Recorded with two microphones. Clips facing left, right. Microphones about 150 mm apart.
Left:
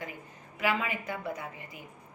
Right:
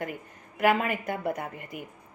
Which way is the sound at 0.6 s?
55° right (ahead or behind).